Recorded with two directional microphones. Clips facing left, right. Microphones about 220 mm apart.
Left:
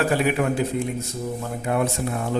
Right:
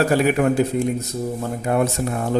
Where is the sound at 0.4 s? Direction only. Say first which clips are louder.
Right 4 dB; 55° right (ahead or behind).